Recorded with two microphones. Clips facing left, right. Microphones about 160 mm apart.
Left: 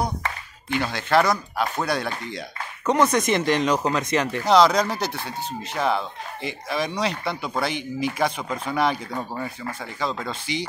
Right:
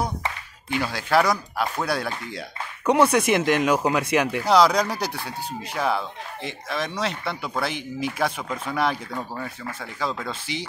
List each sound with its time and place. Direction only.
0.7 s speech: 5° right (ahead or behind)
9.3 s speech: 15° left (ahead or behind)
9.8 s speech: 5° right (ahead or behind)